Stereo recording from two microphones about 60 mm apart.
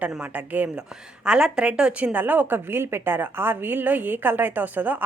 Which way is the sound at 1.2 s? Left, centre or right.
Centre.